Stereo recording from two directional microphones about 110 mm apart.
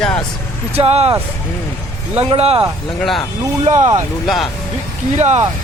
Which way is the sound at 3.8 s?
25° right (ahead or behind).